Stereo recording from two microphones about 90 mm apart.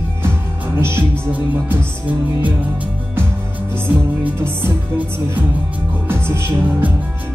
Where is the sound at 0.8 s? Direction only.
30° right (ahead or behind).